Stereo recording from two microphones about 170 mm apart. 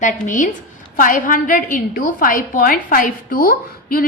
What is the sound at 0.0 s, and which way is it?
A woman's voice, 50° left (ahead or behind).